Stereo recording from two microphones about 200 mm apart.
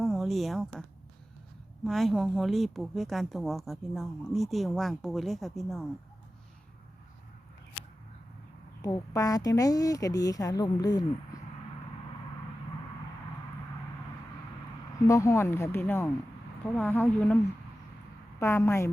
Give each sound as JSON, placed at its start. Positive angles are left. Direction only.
{"t": 0.0, "sound": "a woman's voice", "side_deg": 0}
{"t": 8.8, "sound": "speech", "side_deg": 15}
{"t": 15.0, "sound": "speech", "side_deg": 15}